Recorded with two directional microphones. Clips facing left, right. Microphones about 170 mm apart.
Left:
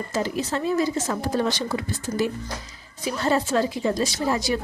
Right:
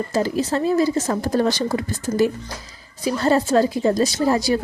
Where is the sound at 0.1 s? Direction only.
35° right (ahead or behind).